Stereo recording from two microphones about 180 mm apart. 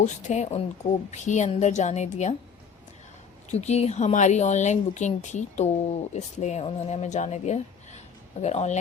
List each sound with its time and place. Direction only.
0.0 s speech: 40° left (ahead or behind)
3.5 s speech: 35° left (ahead or behind)